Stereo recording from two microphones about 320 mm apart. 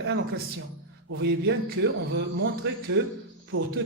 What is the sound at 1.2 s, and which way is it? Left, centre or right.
Speech, right.